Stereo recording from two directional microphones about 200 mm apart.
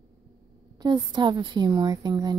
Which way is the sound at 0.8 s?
20° right (ahead or behind).